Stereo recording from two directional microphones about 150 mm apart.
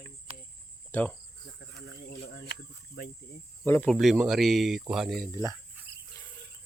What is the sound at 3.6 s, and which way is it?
Speech, 15° left (ahead or behind).